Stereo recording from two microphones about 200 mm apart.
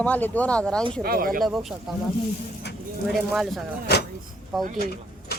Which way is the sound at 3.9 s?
55° left (ahead or behind).